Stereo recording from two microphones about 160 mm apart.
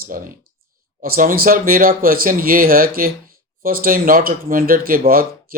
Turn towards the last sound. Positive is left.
turn(degrees=-60)  # may be behind; listen again after turning